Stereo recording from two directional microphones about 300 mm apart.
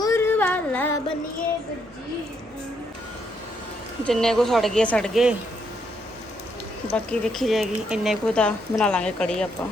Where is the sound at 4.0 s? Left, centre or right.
Centre.